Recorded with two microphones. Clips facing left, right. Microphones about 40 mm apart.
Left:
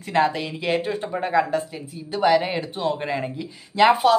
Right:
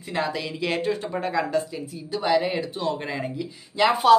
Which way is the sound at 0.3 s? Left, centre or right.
Left.